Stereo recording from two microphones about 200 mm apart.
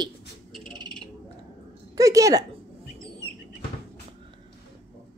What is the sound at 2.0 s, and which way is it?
Speech, 15° right (ahead or behind).